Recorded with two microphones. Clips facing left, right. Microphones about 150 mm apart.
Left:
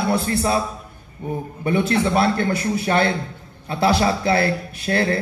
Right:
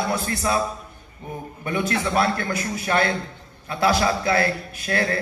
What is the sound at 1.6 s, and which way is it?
A man's voice, 30° left (ahead or behind).